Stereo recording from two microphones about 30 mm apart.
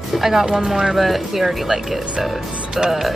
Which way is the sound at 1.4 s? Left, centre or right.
Centre.